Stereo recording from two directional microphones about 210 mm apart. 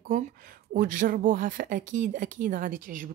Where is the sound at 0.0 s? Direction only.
40° right (ahead or behind).